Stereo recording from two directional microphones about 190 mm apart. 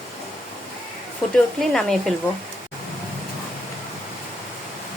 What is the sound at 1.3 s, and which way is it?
Speech, 5° left (ahead or behind).